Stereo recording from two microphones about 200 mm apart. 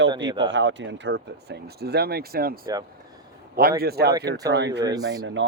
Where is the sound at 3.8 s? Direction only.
50° right (ahead or behind).